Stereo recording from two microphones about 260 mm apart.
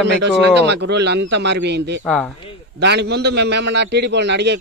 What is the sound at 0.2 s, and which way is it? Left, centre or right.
A man's voice, right.